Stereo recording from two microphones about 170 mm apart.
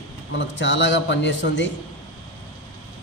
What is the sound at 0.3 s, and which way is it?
A man's voice, 90° left.